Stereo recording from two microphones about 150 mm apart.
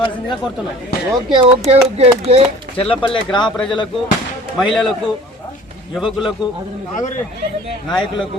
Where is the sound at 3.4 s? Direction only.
5° left (ahead or behind).